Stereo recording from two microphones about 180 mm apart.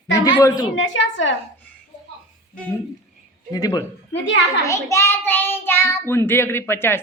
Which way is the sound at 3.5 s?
20° left (ahead or behind).